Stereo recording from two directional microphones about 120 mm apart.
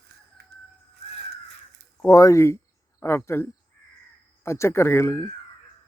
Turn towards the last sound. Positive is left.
turn(degrees=20)  # may be behind; listen again after turning